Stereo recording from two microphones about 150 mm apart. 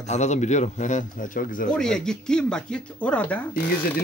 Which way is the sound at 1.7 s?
5° left (ahead or behind).